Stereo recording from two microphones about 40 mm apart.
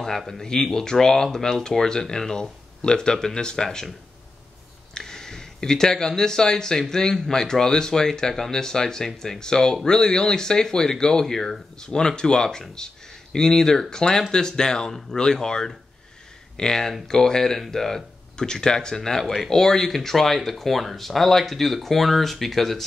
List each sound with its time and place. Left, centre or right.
0.3 s speech: centre
4.9 s speech: centre